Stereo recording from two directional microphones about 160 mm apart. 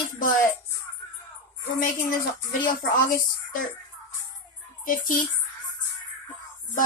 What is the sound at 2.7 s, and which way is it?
Speech, 60° left (ahead or behind).